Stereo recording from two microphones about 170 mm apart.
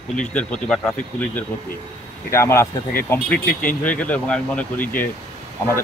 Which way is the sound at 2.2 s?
15° left (ahead or behind).